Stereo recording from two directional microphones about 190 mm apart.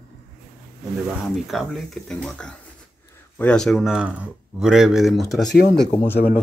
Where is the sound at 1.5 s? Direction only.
Centre (ahead or behind).